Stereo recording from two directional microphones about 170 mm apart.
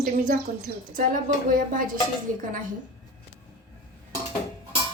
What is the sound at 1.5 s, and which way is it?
Speech, 55° right (ahead or behind).